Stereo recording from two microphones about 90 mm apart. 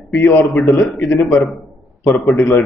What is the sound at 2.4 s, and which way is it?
Speech, 20° left (ahead or behind).